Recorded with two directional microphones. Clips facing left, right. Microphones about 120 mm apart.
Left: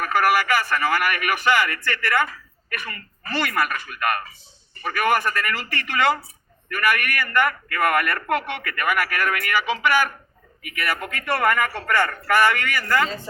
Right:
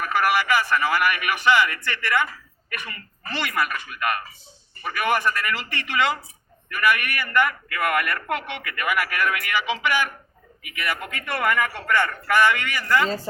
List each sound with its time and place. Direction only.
0.0 s a man's voice: 45° left (ahead or behind)